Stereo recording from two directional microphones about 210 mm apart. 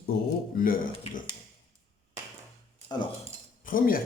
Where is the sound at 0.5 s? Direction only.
45° left (ahead or behind).